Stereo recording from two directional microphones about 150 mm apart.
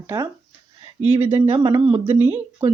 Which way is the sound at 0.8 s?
35° right (ahead or behind).